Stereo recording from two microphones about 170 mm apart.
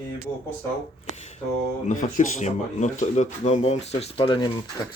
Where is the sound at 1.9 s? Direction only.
50° left (ahead or behind).